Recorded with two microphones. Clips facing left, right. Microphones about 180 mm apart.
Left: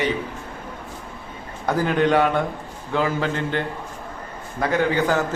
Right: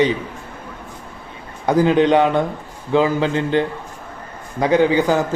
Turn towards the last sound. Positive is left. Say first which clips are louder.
# right 5 dB
turn(degrees=-15)  # may be behind; listen again after turning